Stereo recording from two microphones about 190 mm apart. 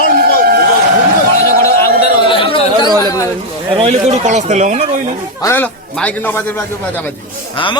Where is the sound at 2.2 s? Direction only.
25° left (ahead or behind).